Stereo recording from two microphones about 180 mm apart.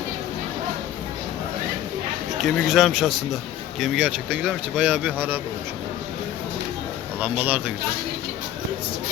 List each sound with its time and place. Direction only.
2.4 s speech: centre (ahead or behind)
7.2 s speech: 10° right (ahead or behind)